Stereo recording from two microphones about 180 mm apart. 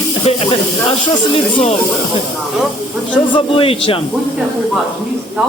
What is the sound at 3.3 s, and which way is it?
Speech, 30° left (ahead or behind).